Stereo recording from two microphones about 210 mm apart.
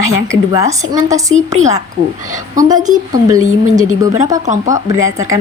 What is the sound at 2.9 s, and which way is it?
A woman's voice, 20° right (ahead or behind).